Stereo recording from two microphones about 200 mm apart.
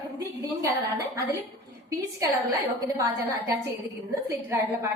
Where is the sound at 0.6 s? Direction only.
15° right (ahead or behind).